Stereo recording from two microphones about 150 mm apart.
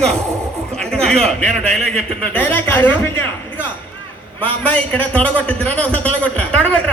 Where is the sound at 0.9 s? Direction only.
5° left (ahead or behind).